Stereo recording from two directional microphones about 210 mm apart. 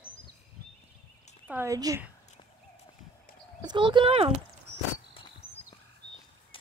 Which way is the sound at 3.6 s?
20° right (ahead or behind).